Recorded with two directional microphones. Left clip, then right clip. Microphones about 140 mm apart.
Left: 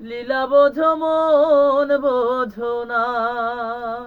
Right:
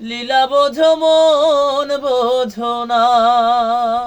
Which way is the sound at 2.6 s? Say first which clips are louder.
Right 6 dB; 30° right (ahead or behind).